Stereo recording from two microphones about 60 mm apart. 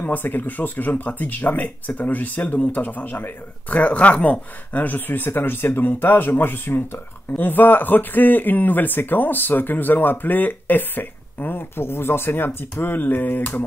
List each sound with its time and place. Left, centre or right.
0.0 s speech: left